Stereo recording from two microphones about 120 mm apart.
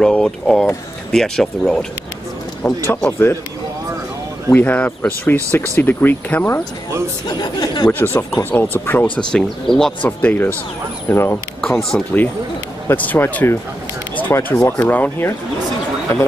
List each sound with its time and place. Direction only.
0.0 s speech: 5° left (ahead or behind)
2.6 s speech: 15° left (ahead or behind)
4.5 s speech: 15° left (ahead or behind)
7.2 s speech: 35° left (ahead or behind)
7.9 s speech: 20° left (ahead or behind)
9.3 s speech: 5° left (ahead or behind); by 11.3 s 20° left (ahead or behind)
11.6 s speech: 5° left (ahead or behind)
12.8 s speech: 15° left (ahead or behind)